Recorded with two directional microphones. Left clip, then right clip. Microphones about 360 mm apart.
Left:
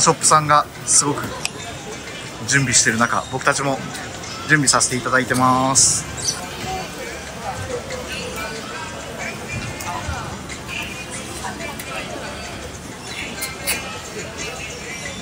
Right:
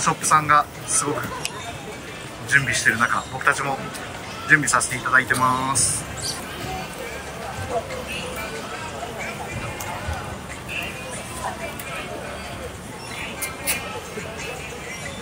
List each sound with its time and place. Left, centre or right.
0.0 s speech: centre
2.5 s speech: centre